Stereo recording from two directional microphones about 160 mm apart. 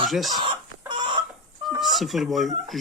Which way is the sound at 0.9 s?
30° right (ahead or behind).